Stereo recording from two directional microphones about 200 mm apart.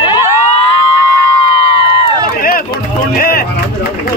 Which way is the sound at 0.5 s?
25° left (ahead or behind).